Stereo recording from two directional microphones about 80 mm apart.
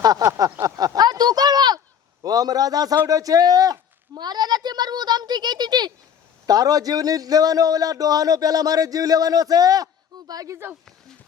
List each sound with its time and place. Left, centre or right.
0.2 s a man's voice: right
0.6 s a sound: right
2.2 s a man's voice: right
6.4 s a man's voice: right